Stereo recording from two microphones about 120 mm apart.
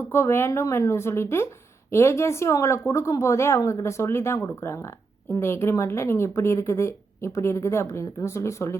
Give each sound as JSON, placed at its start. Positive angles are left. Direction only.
{"t": 0.0, "sound": "a woman's voice", "side_deg": 20}